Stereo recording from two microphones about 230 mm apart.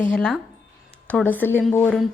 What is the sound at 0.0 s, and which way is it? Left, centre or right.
A woman's voice, centre.